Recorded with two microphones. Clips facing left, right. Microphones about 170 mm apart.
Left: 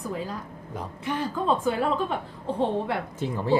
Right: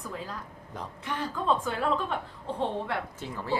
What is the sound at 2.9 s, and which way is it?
Speech, 20° left (ahead or behind).